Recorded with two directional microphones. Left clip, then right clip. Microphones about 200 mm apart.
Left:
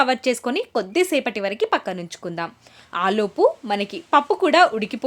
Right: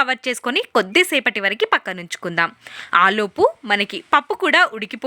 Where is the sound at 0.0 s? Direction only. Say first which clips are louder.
Even; 10° right (ahead or behind).